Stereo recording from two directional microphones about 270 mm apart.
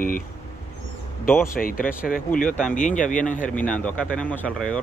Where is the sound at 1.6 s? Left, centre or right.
Left.